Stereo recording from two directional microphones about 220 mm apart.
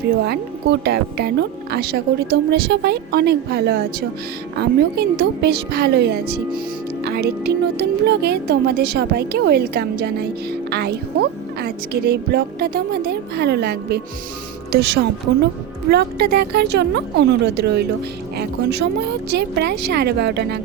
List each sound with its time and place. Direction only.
0.3 s speech: 45° right (ahead or behind)